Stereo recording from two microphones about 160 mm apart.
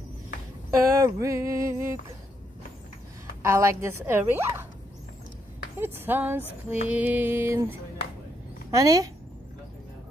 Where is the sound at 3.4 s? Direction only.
15° right (ahead or behind).